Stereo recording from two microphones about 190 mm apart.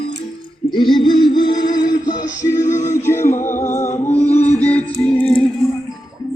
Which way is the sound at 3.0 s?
15° left (ahead or behind).